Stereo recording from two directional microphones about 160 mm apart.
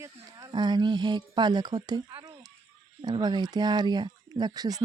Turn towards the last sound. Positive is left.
turn(degrees=-25)  # may be behind; listen again after turning